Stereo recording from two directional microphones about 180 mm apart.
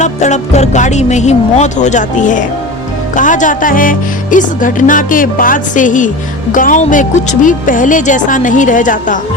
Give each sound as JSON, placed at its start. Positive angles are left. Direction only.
{"t": 0.0, "sound": "speech", "side_deg": 40}
{"t": 3.2, "sound": "music", "side_deg": 45}